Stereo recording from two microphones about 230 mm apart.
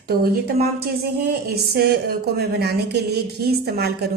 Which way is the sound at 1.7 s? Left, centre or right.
Right.